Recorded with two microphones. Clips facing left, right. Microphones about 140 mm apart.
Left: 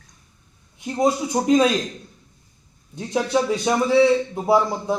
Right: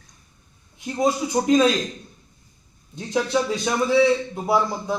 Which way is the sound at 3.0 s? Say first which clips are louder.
Left 1 dB; 15° left (ahead or behind).